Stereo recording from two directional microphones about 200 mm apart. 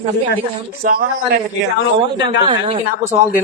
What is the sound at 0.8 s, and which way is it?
Speech, 50° right (ahead or behind).